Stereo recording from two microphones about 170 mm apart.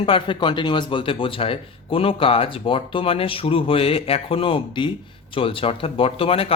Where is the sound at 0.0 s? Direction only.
30° left (ahead or behind).